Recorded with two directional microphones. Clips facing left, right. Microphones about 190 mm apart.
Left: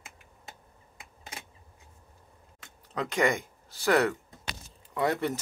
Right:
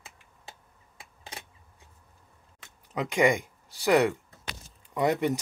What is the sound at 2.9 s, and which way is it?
Speech, 15° right (ahead or behind).